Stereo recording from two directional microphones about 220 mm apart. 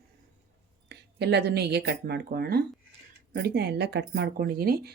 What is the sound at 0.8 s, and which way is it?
Speech, 50° right (ahead or behind).